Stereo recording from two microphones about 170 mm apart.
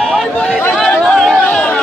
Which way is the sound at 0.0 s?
Centre (ahead or behind).